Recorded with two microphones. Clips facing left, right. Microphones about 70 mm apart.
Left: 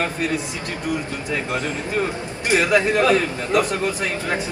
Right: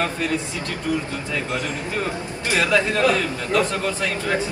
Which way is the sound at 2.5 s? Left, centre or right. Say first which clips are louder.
Left 2 dB; left.